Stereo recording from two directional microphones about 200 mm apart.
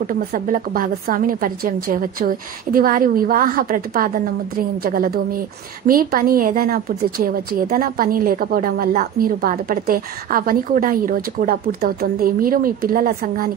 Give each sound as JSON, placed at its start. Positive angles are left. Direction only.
{"t": 0.0, "sound": "a woman's voice", "side_deg": -45}